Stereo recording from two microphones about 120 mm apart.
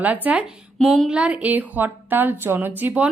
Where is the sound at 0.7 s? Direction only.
Centre (ahead or behind).